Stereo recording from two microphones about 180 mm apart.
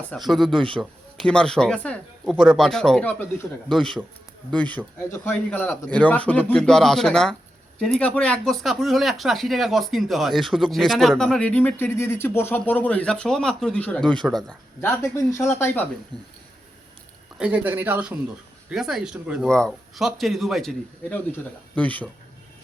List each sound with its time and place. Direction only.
0.3 s speech: centre (ahead or behind)
0.5 s a man's voice: 30° right (ahead or behind)
0.8 s speech: 5° left (ahead or behind)
14.8 s speech: 15° left (ahead or behind)
16.1 s a man's voice: 25° right (ahead or behind)
17.3 s speech: 5° right (ahead or behind)